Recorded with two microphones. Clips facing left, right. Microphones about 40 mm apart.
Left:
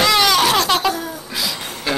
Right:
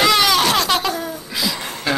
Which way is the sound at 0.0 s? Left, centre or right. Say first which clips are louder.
Even; centre.